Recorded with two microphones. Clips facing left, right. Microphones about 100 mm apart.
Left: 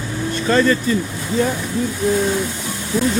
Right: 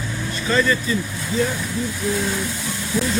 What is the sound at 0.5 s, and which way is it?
Speech, 40° left (ahead or behind).